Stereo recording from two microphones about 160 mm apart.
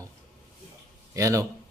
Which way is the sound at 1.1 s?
20° right (ahead or behind).